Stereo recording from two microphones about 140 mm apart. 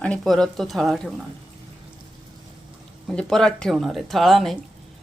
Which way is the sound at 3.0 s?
5° left (ahead or behind).